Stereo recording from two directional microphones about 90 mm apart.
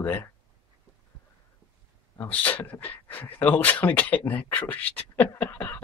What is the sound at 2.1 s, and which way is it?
Speech, 25° left (ahead or behind).